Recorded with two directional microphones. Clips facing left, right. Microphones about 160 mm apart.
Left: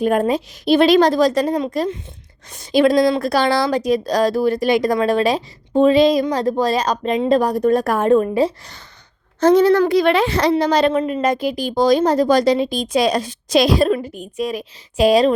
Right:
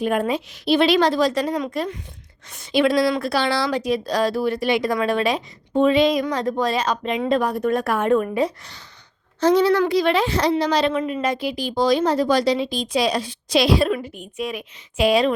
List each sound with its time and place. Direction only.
0.0 s a woman's voice: 40° left (ahead or behind)
9.4 s a woman's voice: 50° left (ahead or behind)
10.5 s a woman's voice: 50° left (ahead or behind)